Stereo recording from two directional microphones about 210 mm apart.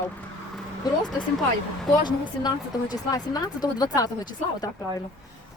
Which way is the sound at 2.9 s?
20° left (ahead or behind).